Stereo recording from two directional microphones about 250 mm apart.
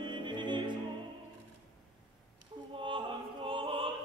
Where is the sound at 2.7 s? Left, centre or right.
Centre.